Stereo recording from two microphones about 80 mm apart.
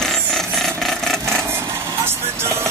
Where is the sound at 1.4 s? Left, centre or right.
Right.